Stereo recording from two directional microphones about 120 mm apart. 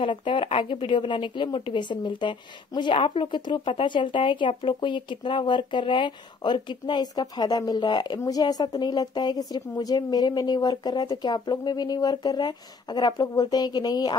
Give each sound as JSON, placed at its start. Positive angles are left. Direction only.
{"t": 0.0, "sound": "speech", "side_deg": 45}